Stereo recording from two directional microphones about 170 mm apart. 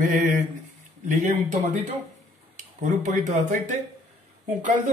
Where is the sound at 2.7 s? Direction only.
45° right (ahead or behind).